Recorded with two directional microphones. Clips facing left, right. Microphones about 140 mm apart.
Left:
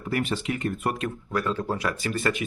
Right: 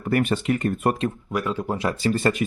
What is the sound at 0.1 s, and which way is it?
Speech, 50° right (ahead or behind).